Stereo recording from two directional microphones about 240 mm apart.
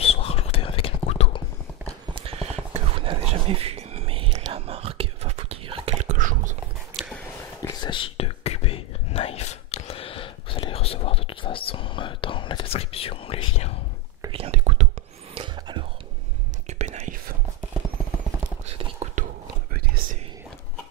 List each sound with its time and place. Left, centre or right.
0.0 s whispering: left
2.1 s a sound: right
7.0 s a sound: centre
7.6 s whispering: centre
14.2 s whispering: right
19.0 s whispering: right
19.7 s whispering: right